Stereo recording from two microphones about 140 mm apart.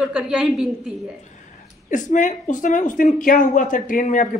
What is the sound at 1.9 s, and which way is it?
Speech, 65° left (ahead or behind).